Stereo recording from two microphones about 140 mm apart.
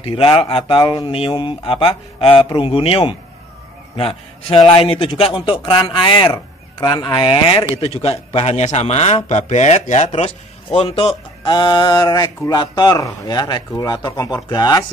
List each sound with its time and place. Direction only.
0.0 s a man's voice: 40° left (ahead or behind)